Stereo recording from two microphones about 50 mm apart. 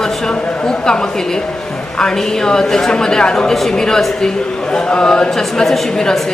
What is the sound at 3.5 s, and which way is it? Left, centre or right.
Speech, centre.